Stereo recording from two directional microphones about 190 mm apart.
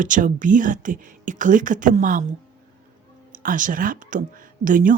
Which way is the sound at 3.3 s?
45° right (ahead or behind).